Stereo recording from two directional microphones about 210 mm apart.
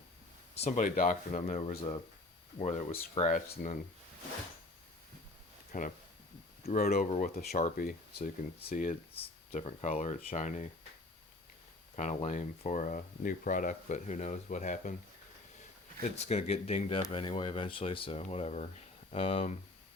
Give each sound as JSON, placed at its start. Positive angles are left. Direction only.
{"t": 0.6, "sound": "speech", "side_deg": 40}
{"t": 5.7, "sound": "speech", "side_deg": 40}
{"t": 7.1, "sound": "speech", "side_deg": 30}
{"t": 11.9, "sound": "speech", "side_deg": 35}
{"t": 16.1, "sound": "speech", "side_deg": 30}